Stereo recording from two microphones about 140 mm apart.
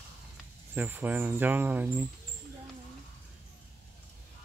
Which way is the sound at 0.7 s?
15° right (ahead or behind).